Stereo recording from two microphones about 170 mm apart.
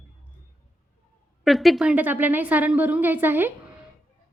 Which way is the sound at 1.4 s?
Centre (ahead or behind).